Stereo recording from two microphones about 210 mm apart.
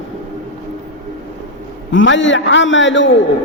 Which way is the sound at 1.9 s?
65° left (ahead or behind).